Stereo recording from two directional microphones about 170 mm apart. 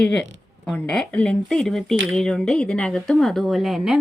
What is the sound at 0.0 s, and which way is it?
Speech, 5° left (ahead or behind).